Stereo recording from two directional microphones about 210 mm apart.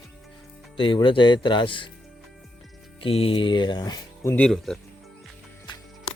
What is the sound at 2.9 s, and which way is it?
Speech, 25° left (ahead or behind).